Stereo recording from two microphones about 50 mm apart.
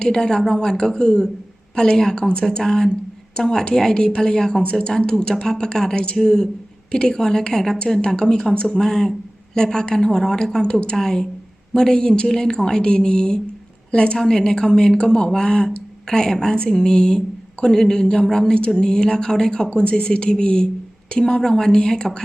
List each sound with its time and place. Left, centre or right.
0.0 s a woman's voice: centre